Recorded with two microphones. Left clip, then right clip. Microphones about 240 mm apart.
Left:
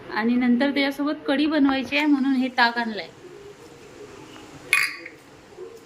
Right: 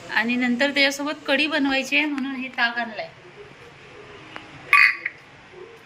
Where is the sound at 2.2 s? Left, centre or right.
Centre.